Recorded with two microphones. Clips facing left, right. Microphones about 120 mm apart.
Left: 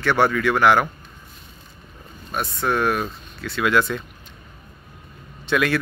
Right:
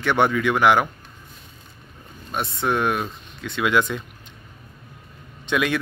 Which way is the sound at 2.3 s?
25° right (ahead or behind).